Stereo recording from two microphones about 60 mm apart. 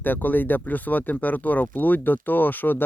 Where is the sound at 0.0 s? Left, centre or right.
Left.